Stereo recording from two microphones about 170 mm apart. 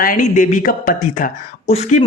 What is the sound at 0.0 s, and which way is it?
A man's voice, 50° left (ahead or behind).